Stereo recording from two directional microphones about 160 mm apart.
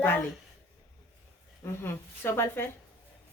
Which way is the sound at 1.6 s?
15° left (ahead or behind).